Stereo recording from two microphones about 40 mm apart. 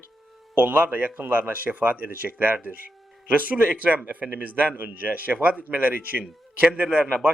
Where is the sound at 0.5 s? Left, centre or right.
Right.